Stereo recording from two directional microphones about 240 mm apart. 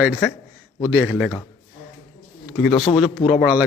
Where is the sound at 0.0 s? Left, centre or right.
Centre.